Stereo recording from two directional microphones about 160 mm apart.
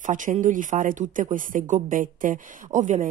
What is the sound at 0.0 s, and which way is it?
Speech, 55° right (ahead or behind).